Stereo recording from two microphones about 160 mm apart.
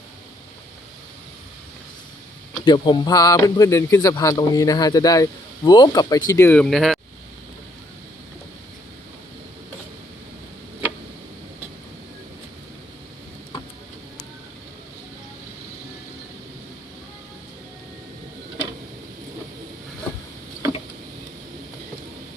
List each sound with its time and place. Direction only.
2.6 s speech: 30° left (ahead or behind); by 7.0 s centre (ahead or behind)